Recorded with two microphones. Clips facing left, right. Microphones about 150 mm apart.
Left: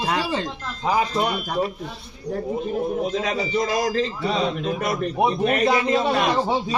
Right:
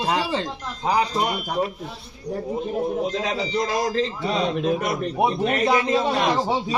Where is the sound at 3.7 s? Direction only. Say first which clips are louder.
Left 1 dB; 25° right (ahead or behind).